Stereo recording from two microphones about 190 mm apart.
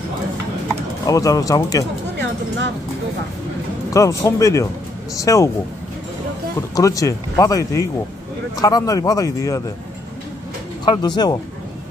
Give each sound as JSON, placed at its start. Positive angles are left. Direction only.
{"t": 1.0, "sound": "speech", "side_deg": 20}
{"t": 3.9, "sound": "speech", "side_deg": 15}
{"t": 6.7, "sound": "speech", "side_deg": 20}
{"t": 10.9, "sound": "speech", "side_deg": 20}